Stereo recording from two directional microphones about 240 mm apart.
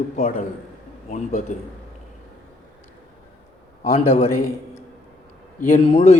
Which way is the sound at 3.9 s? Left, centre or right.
Left.